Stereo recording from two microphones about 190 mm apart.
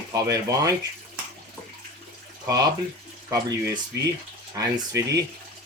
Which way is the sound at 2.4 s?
20° right (ahead or behind).